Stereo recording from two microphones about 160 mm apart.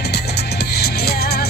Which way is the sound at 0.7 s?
90° left.